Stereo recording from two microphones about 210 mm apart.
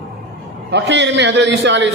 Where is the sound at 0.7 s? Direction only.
55° right (ahead or behind).